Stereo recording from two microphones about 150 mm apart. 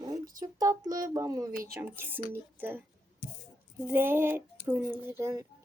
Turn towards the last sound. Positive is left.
turn(degrees=-20)  # may be behind; listen again after turning